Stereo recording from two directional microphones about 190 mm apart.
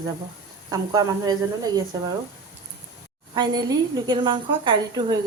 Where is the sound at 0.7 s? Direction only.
20° right (ahead or behind).